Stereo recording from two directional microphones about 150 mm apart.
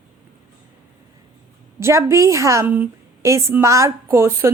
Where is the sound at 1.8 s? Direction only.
20° right (ahead or behind).